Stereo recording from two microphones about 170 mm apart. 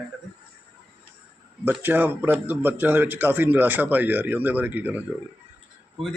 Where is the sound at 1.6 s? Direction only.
10° right (ahead or behind).